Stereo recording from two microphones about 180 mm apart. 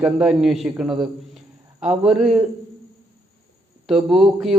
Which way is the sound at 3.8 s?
Centre (ahead or behind).